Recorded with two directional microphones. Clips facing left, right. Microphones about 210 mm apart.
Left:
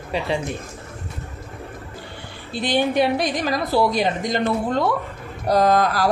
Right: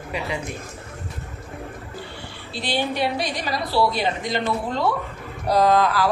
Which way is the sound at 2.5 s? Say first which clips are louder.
Left 6 dB; 50° left (ahead or behind).